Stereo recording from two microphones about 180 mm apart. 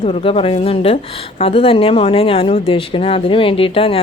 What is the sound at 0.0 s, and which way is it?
A woman's voice, 30° left (ahead or behind).